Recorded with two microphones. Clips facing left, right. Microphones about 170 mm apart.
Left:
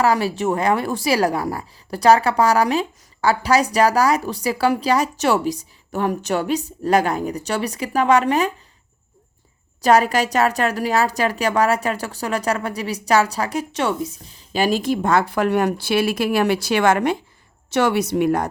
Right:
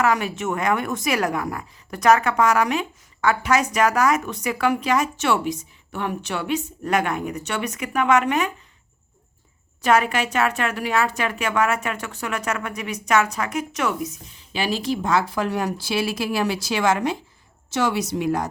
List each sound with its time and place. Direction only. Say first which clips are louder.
0.0 s a woman's voice: left 3 dB; 35° left (ahead or behind)
9.8 s a woman's voice: left 4 dB; 35° left (ahead or behind); by 18.4 s 55° left (ahead or behind)